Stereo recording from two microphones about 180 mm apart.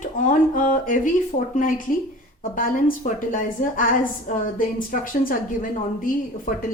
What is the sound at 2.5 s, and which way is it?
A woman's voice, 50° left (ahead or behind).